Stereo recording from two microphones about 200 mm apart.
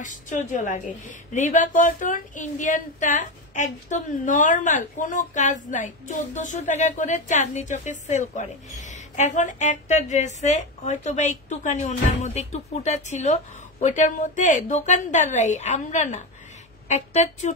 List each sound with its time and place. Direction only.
0.0 s a woman's voice: 40° left (ahead or behind)